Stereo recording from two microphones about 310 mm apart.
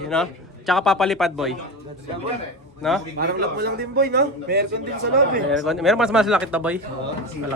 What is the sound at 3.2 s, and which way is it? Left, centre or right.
A man's voice, right.